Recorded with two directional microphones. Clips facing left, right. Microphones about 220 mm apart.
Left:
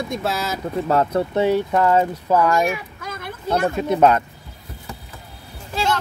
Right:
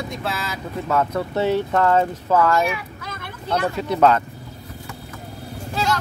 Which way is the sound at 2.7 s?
45° left (ahead or behind).